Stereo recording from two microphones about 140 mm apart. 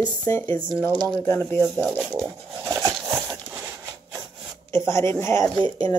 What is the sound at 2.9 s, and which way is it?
Horse, 10° right (ahead or behind).